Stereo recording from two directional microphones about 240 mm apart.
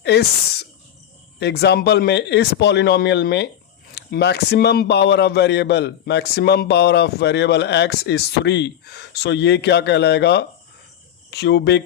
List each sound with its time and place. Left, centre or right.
0.0 s a man's voice: left